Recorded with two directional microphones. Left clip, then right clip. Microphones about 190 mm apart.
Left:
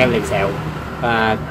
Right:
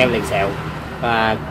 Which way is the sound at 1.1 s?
5° right (ahead or behind).